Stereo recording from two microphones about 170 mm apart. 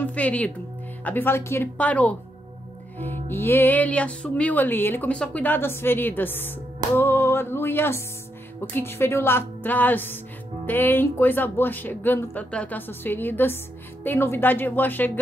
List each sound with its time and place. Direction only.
0.0 s music: 10° left (ahead or behind)